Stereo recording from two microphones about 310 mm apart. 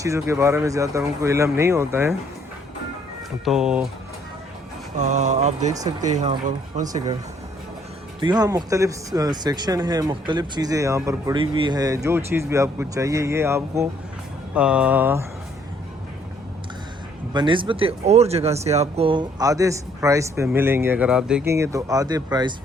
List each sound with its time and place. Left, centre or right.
0.0 s speech: centre
3.4 s speech: centre
4.9 s speech: right
8.2 s speech: centre
17.3 s speech: centre